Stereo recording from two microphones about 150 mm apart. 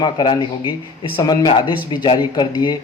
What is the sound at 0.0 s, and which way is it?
Speech, 30° left (ahead or behind).